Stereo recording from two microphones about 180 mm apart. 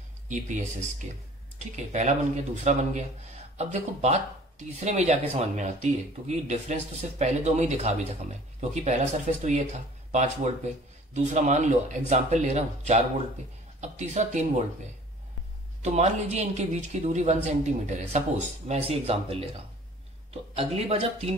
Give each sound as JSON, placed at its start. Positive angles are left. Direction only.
{"t": 0.3, "sound": "speech", "side_deg": -45}
{"t": 15.8, "sound": "speech", "side_deg": -40}
{"t": 20.5, "sound": "speech", "side_deg": -35}